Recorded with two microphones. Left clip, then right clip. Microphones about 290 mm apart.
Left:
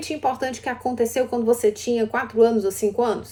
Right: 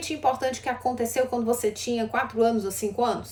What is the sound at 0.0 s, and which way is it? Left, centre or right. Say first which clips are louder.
A woman's voice: left 1 dB; centre.